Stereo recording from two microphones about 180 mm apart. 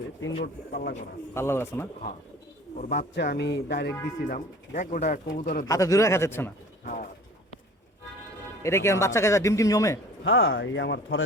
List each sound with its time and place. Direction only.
0.4 s speech: 55° left (ahead or behind)
1.3 s speech: 15° left (ahead or behind)
2.7 s speech: 50° left (ahead or behind)
3.2 s speech: 70° left (ahead or behind)
4.3 s speech: 45° left (ahead or behind)
5.6 s speech: 15° left (ahead or behind)
6.8 s speech: 55° left (ahead or behind)
8.6 s speech: 15° left (ahead or behind)
10.2 s speech: 90° left